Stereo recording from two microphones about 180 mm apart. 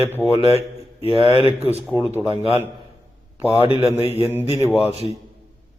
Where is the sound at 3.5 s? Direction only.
30° left (ahead or behind).